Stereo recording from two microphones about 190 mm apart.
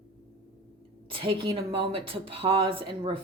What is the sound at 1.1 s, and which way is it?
A woman's voice, 25° right (ahead or behind).